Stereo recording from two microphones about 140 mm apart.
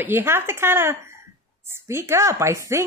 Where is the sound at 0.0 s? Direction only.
15° right (ahead or behind).